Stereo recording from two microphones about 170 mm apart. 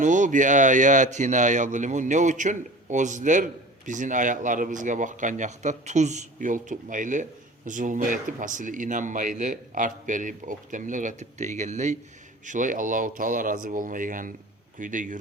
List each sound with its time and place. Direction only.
0.0 s a man's voice: 50° right (ahead or behind)